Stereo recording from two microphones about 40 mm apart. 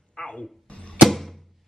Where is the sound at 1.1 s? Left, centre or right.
Centre.